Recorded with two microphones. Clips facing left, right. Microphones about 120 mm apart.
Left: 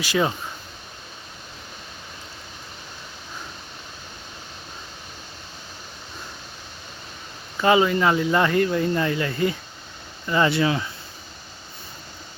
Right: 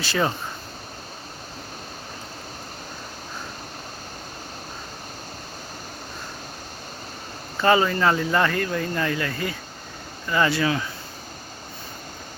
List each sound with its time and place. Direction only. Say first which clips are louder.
0.0 s speech: left 1 dB; 10° left (ahead or behind)
7.6 s speech: left 1 dB; 15° left (ahead or behind)